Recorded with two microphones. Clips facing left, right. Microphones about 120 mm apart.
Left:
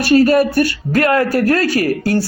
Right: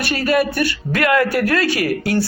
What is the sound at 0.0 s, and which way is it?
Speech, 40° left (ahead or behind).